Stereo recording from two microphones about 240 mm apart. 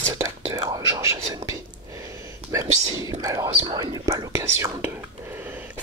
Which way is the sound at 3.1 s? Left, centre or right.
Centre.